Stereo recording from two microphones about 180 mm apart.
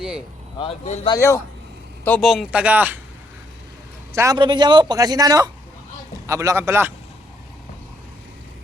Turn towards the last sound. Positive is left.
turn(degrees=-15)  # may be behind; listen again after turning